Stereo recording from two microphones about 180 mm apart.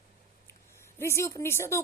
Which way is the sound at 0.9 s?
15° left (ahead or behind).